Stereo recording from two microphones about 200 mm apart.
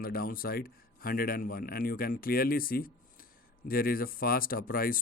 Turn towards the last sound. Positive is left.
turn(degrees=45)  # may be behind; listen again after turning